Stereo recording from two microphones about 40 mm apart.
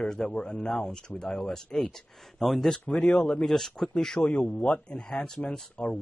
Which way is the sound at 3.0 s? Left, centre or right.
Centre.